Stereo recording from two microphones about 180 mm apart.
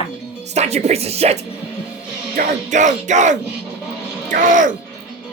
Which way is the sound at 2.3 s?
45° right (ahead or behind).